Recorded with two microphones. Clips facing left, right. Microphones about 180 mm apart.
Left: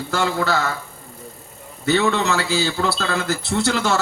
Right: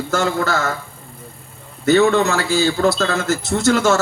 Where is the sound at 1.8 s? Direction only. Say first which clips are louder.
Right 5 dB; 45° right (ahead or behind).